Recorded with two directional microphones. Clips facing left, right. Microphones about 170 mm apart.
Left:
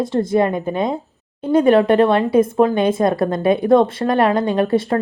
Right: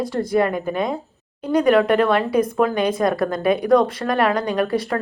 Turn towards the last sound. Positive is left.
turn(degrees=25)  # may be behind; listen again after turning